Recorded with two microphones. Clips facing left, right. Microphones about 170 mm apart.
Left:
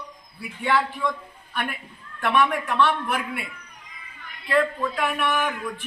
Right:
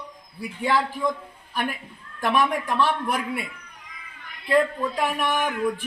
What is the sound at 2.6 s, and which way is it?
Speech, 35° right (ahead or behind).